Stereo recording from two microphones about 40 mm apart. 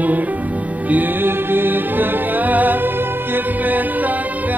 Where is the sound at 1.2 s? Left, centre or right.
Right.